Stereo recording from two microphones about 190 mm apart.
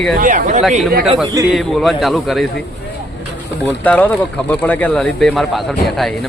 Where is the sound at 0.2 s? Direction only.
45° right (ahead or behind).